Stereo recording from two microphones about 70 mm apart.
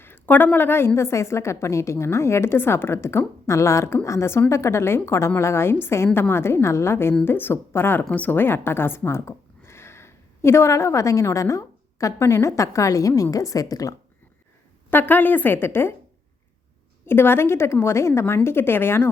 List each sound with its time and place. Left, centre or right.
0.0 s a woman's voice: left
14.8 s a woman's voice: left
17.1 s a woman's voice: left